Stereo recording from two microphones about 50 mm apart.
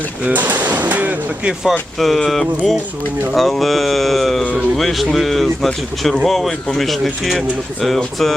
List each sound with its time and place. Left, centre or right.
0.3 s speech: right
2.0 s speech: centre